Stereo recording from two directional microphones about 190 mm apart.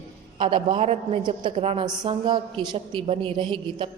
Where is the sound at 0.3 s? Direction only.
25° right (ahead or behind).